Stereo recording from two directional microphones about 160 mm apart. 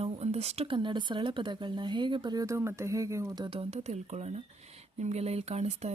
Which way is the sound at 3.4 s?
40° right (ahead or behind).